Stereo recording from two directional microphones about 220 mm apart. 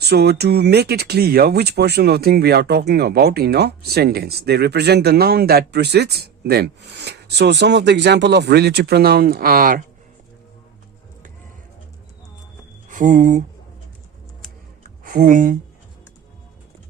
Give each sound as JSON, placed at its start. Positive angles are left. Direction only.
{"t": 0.0, "sound": "speech", "side_deg": -45}
{"t": 12.9, "sound": "speech", "side_deg": -35}
{"t": 15.0, "sound": "speech", "side_deg": -40}